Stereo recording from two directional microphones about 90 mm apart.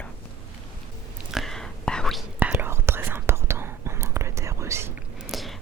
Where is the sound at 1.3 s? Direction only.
Centre (ahead or behind).